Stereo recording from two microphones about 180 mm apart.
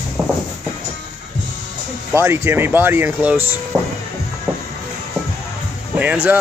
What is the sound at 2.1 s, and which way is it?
A man's voice, 15° right (ahead or behind).